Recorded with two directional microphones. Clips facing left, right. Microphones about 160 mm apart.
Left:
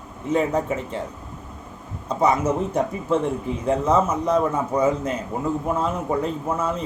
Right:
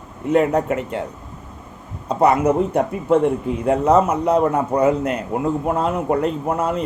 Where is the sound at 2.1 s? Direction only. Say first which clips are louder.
Right 4 dB; 65° right (ahead or behind).